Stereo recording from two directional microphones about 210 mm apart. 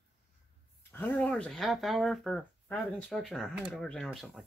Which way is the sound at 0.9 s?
10° left (ahead or behind).